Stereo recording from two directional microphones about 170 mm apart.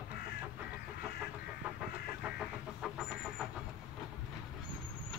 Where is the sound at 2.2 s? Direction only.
Centre (ahead or behind).